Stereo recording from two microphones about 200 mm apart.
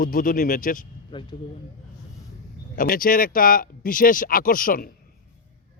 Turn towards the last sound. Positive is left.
turn(degrees=45)  # may be behind; listen again after turning